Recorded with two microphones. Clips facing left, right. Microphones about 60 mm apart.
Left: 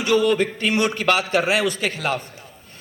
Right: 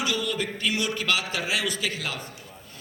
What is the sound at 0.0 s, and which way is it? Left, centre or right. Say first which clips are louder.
A man's voice: left 10 dB; left.